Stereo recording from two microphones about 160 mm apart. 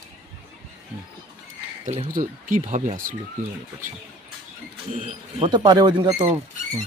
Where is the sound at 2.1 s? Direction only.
50° right (ahead or behind).